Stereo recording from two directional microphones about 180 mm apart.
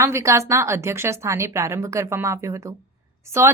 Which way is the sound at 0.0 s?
15° right (ahead or behind).